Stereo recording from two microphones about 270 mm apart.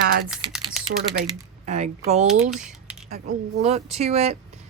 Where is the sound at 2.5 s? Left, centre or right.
Centre.